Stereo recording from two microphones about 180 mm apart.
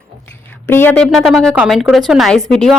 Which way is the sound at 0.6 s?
10° left (ahead or behind).